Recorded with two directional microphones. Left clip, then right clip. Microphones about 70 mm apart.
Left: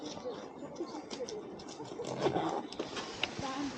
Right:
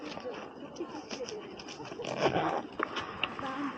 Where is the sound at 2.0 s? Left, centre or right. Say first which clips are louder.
Right 4 dB; centre.